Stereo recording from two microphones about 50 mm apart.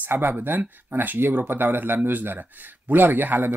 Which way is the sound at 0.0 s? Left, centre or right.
Right.